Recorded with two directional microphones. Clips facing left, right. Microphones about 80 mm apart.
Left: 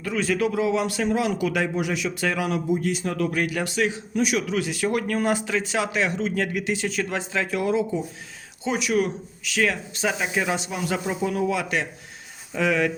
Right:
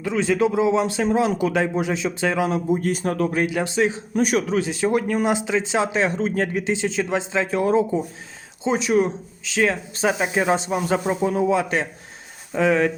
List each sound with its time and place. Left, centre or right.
0.0 s speech: right
2.6 s speech: right
3.4 s speech: right
4.1 s speech: right